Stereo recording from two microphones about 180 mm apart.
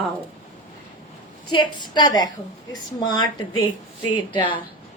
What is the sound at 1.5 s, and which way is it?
A woman's voice, 25° left (ahead or behind).